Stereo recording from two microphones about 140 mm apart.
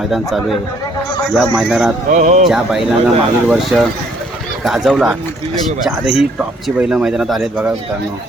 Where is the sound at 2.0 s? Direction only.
60° right (ahead or behind).